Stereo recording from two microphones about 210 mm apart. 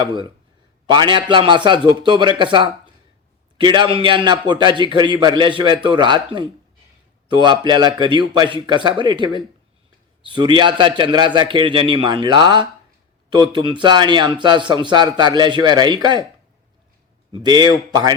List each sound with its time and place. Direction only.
0.0 s a man's voice: 20° right (ahead or behind)
17.3 s a man's voice: 20° right (ahead or behind)